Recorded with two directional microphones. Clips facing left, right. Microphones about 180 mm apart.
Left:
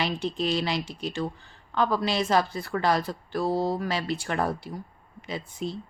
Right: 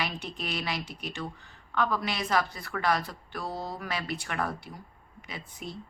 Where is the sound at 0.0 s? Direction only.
30° left (ahead or behind).